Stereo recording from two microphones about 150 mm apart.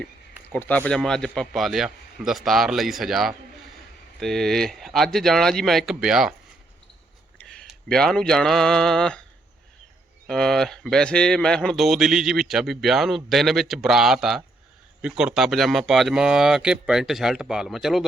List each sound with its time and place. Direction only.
0.5 s speech: 10° left (ahead or behind); by 6.3 s 5° right (ahead or behind)
7.4 s speech: 5° left (ahead or behind)
10.2 s speech: 5° left (ahead or behind)